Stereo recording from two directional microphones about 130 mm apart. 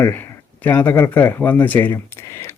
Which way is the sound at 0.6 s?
15° left (ahead or behind).